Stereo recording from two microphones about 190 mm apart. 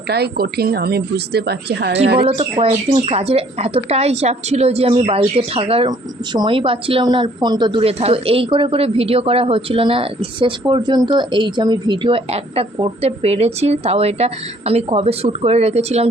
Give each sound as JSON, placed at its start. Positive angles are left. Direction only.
{"t": 0.1, "sound": "a woman's voice", "side_deg": -55}
{"t": 2.2, "sound": "speech", "side_deg": -30}